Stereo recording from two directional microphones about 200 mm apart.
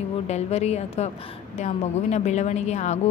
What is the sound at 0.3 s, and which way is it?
A woman's voice, 35° left (ahead or behind).